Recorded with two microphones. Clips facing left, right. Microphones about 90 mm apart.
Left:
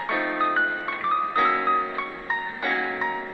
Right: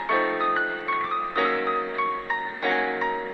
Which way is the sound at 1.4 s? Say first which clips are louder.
Left 1 dB; 20° left (ahead or behind).